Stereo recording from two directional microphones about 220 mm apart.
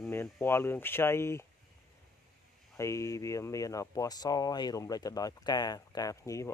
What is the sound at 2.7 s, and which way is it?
Speech, 15° left (ahead or behind).